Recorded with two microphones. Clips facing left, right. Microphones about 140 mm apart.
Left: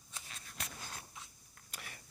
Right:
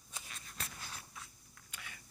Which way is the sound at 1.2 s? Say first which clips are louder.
Right 1 dB; 20° left (ahead or behind).